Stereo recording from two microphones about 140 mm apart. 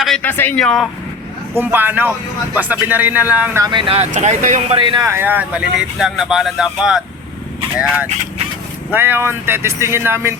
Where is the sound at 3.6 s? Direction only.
35° right (ahead or behind).